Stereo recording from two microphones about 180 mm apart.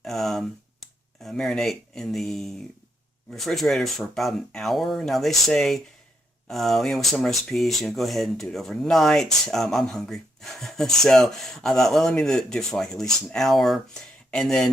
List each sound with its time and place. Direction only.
0.0 s speech: centre (ahead or behind)